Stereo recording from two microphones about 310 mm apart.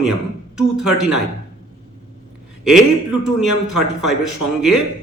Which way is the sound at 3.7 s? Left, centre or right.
Centre.